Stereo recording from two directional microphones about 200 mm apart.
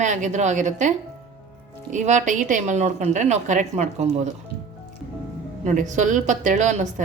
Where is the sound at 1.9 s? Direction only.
35° right (ahead or behind).